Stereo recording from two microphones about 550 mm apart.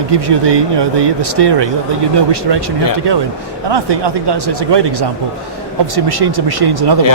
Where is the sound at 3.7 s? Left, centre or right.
Right.